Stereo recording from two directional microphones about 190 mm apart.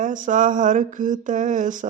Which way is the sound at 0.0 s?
40° right (ahead or behind).